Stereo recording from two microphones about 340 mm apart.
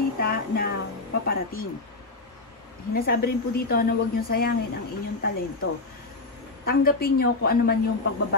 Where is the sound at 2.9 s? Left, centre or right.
Left.